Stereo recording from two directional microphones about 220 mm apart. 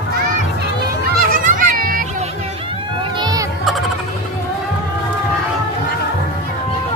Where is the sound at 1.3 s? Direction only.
35° right (ahead or behind).